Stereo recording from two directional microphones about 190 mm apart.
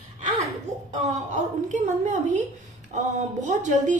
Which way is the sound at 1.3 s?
40° right (ahead or behind).